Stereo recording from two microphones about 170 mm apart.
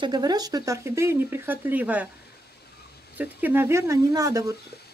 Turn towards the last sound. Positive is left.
turn(degrees=-20)  # may be behind; listen again after turning